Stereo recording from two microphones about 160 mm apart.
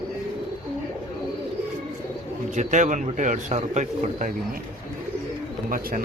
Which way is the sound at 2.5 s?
50° right (ahead or behind).